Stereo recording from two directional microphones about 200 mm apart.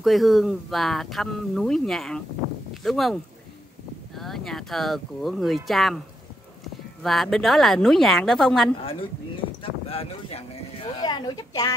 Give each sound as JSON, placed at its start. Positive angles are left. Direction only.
{"t": 0.0, "sound": "speech", "side_deg": 0}
{"t": 7.0, "sound": "speech", "side_deg": 0}
{"t": 9.6, "sound": "speech", "side_deg": 30}